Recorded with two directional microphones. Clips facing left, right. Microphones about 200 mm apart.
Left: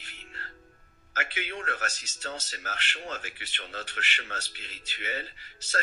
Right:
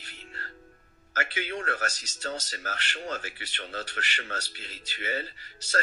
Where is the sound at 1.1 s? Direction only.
40° right (ahead or behind).